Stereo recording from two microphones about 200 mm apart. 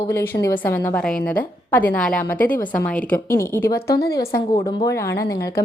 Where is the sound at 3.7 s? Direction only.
50° left (ahead or behind).